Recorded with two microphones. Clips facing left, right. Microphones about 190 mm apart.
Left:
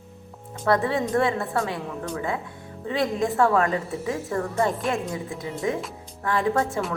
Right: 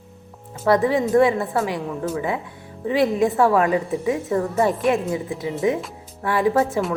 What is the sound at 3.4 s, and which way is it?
Speech, 15° right (ahead or behind).